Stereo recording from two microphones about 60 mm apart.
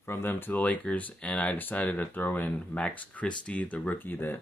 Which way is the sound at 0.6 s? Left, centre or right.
Left.